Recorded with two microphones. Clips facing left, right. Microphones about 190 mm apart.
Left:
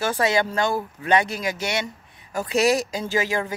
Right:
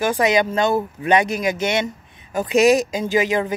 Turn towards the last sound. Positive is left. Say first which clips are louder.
# right 5 dB
turn(degrees=-20)  # may be behind; listen again after turning